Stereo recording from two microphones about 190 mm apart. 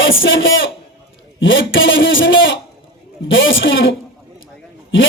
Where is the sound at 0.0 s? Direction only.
85° left.